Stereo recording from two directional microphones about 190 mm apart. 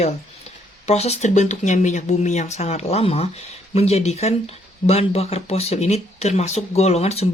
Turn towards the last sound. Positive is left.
turn(degrees=35)  # may be behind; listen again after turning